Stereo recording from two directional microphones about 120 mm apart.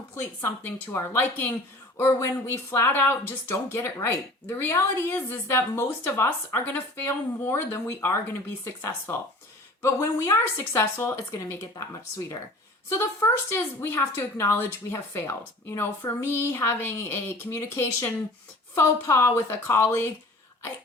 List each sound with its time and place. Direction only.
0.2 s a woman's voice: 20° left (ahead or behind)
12.9 s a woman's voice: 20° left (ahead or behind)